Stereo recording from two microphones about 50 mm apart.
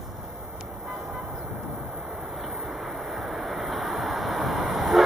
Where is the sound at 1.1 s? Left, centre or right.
Centre.